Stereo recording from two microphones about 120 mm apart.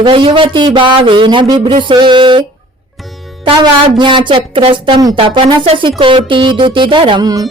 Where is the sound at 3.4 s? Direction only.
40° right (ahead or behind).